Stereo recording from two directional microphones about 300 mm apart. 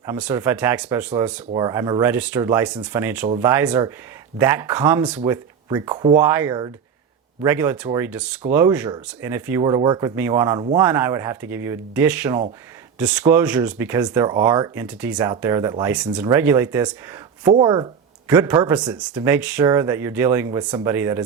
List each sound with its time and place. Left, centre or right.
0.0 s speech: centre